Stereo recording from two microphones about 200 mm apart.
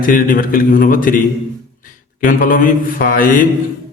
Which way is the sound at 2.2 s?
40° left (ahead or behind).